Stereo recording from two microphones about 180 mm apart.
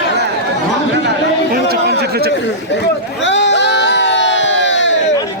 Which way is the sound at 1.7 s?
60° right (ahead or behind).